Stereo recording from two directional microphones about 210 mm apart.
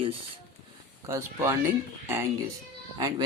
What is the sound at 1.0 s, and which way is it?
Speech, 15° right (ahead or behind).